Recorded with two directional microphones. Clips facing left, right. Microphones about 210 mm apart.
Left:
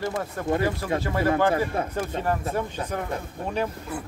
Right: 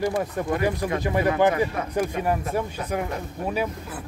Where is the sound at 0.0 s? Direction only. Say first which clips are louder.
Right 4 dB; 15° right (ahead or behind).